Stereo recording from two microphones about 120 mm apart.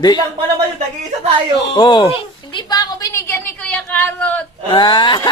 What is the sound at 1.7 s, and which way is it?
A woman's voice, 40° left (ahead or behind).